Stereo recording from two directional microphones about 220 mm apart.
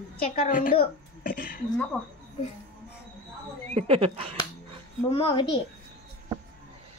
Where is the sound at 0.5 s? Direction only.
40° left (ahead or behind).